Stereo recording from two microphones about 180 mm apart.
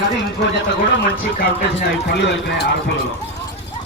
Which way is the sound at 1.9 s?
70° left (ahead or behind).